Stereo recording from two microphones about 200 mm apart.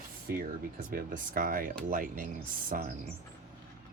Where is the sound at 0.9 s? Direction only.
45° right (ahead or behind).